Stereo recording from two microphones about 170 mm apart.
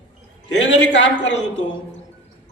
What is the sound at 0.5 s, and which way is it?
Speech, 90° left.